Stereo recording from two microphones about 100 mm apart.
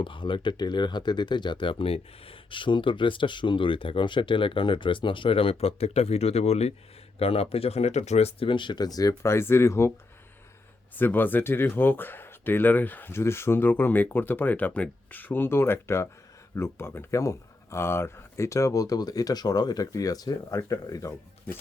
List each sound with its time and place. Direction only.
0.0 s speech: 55° left (ahead or behind); by 6.7 s 90° left
7.2 s speech: 75° left (ahead or behind); by 9.9 s 25° left (ahead or behind)
10.9 s speech: 20° left (ahead or behind)